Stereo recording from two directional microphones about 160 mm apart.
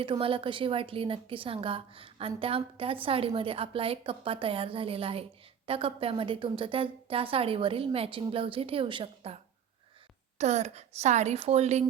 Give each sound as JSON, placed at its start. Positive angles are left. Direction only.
{"t": 0.0, "sound": "a woman's voice", "side_deg": -35}